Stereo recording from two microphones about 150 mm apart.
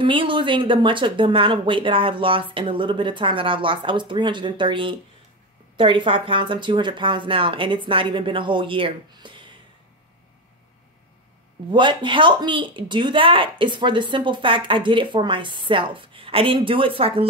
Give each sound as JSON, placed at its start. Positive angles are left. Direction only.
{"t": 0.0, "sound": "speech", "side_deg": -35}
{"t": 11.7, "sound": "speech", "side_deg": -30}